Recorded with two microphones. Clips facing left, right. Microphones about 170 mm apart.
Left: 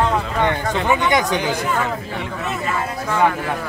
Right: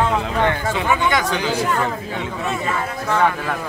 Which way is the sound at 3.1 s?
10° left (ahead or behind).